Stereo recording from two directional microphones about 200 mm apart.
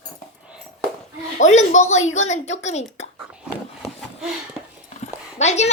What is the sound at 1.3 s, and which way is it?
Speech, 35° left (ahead or behind).